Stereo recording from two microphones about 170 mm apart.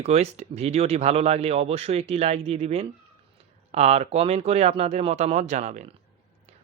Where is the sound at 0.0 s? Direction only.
40° right (ahead or behind).